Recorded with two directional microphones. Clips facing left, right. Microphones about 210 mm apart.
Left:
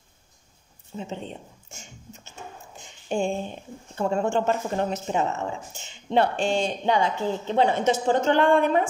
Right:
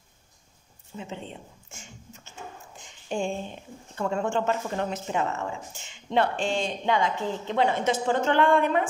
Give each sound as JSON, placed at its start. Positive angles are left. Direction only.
{"t": 0.9, "sound": "speech", "side_deg": 35}
{"t": 3.1, "sound": "speech", "side_deg": 40}